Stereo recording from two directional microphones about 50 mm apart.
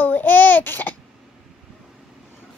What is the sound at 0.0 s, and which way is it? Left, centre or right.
Babbling, left.